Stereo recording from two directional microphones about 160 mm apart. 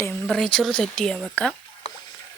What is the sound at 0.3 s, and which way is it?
Speech, 5° left (ahead or behind).